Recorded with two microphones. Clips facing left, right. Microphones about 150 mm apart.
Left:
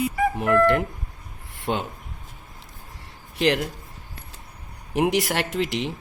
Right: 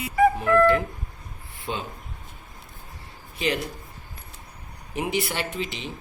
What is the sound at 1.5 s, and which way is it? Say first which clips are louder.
Speech: left 5 dB; 75° left (ahead or behind).